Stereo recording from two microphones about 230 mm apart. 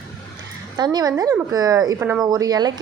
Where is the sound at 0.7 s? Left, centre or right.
Centre.